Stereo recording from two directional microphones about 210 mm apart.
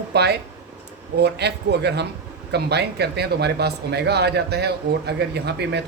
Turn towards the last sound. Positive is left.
turn(degrees=-55)  # may be behind; listen again after turning